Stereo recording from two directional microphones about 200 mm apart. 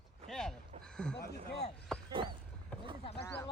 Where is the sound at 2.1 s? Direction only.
25° right (ahead or behind).